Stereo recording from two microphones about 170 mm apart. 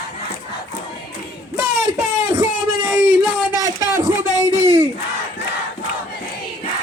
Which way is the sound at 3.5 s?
20° right (ahead or behind).